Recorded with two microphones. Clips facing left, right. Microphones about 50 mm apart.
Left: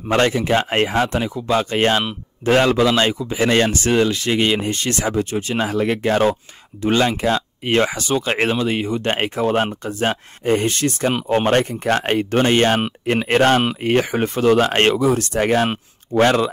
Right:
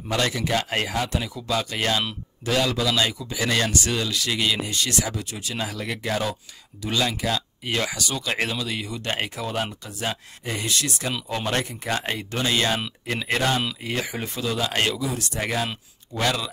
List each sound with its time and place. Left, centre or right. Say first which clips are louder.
0.1 s a man's voice: left 7 dB; left